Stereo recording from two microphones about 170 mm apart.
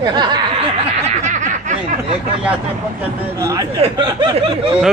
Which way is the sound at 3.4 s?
20° right (ahead or behind).